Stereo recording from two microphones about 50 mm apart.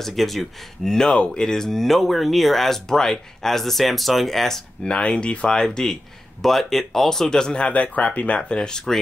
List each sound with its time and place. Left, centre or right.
0.0 s speech: centre
0.9 s speech: centre
4.8 s speech: centre
5.6 s speech: centre; by 8.4 s left
8.4 s speech: centre